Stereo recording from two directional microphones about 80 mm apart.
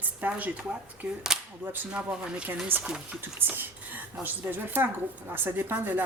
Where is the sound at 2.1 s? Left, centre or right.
Centre.